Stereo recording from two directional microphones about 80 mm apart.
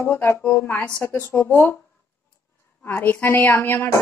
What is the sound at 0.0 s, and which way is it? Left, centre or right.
Speech, left.